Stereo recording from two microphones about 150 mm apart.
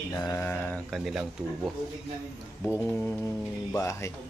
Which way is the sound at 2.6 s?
15° left (ahead or behind).